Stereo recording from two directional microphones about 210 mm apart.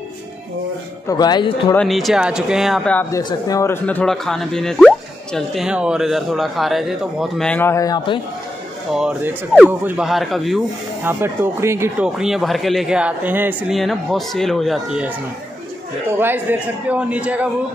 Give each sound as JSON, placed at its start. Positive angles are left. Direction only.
{"t": 1.0, "sound": "speech", "side_deg": 20}
{"t": 1.8, "sound": "speech", "side_deg": 0}
{"t": 8.9, "sound": "speech", "side_deg": -5}
{"t": 11.1, "sound": "speech", "side_deg": -10}
{"t": 16.1, "sound": "a man's voice", "side_deg": -10}